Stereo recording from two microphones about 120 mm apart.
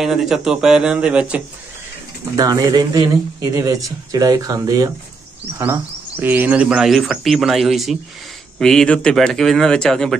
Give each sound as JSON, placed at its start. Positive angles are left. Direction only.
{"t": 0.0, "sound": "speech", "side_deg": 0}
{"t": 2.3, "sound": "speech", "side_deg": -30}
{"t": 5.6, "sound": "speech", "side_deg": -15}